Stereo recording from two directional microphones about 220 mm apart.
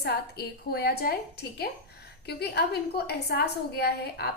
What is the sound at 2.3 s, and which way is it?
A woman's voice, 45° left (ahead or behind).